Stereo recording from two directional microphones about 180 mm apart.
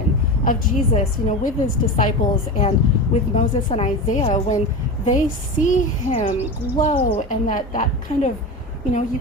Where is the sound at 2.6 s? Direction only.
40° left (ahead or behind).